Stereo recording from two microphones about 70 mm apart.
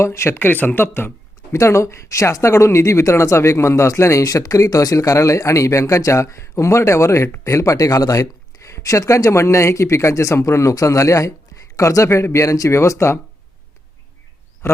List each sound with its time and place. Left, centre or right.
0.0 s speech: left
1.5 s speech: left
4.2 s speech: left
14.6 s speech: left